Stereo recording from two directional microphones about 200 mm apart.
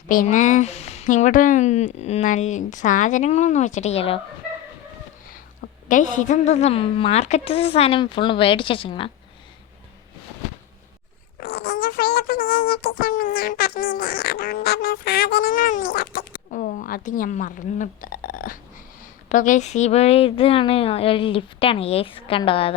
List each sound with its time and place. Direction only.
0.1 s speech: 40° left (ahead or behind)
5.9 s speech: 40° left (ahead or behind)
11.3 s speech: 55° left (ahead or behind); by 22.7 s 25° left (ahead or behind)